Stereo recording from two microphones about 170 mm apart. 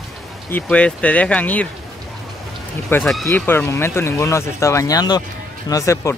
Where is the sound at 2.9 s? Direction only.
15° left (ahead or behind).